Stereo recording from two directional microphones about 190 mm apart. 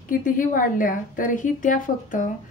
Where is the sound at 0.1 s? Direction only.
45° left (ahead or behind).